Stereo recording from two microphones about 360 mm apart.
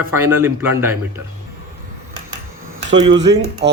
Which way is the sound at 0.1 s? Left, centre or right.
Centre.